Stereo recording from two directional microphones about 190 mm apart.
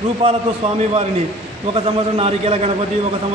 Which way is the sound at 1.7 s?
30° right (ahead or behind).